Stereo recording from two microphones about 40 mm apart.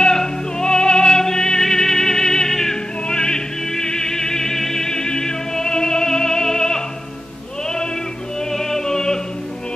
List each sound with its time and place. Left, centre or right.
0.0 s music: centre
7.6 s sheep: centre
8.4 s music: centre